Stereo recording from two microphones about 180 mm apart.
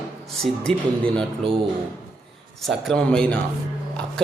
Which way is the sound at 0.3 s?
5° left (ahead or behind).